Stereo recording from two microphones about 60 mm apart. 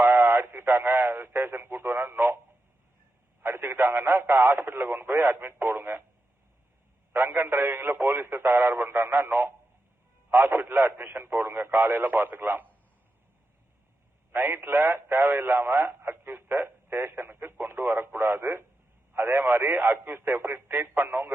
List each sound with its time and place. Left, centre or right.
0.0 s radio: right
3.4 s a sound: right
4.5 s speech: right
7.2 s speech: right
10.3 s a sound: right
10.8 s speech: right
14.3 s speech: right
15.9 s telephone: right
19.1 s speech: right